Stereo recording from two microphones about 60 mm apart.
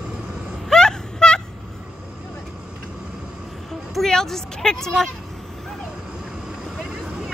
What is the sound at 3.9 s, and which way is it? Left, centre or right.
Speech, centre.